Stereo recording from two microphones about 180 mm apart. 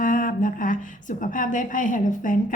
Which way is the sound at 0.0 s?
50° left (ahead or behind).